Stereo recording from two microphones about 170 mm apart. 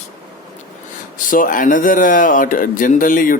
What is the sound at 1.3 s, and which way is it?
Speech, 55° left (ahead or behind).